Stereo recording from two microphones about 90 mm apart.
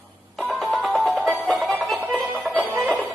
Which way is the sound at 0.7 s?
Centre (ahead or behind).